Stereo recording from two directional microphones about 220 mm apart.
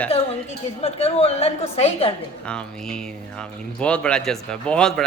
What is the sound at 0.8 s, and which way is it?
A woman's voice, 30° left (ahead or behind).